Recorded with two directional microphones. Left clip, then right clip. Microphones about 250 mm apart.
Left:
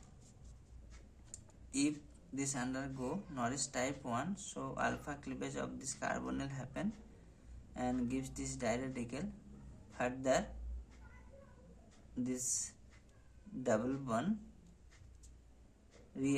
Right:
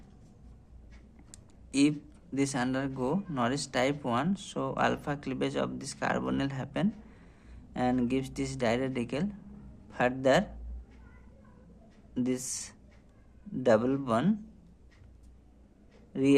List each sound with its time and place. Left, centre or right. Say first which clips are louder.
1.3 s a sound: right 9 dB; right
2.3 s speech: right 10 dB; right
12.1 s speech: right 7 dB; right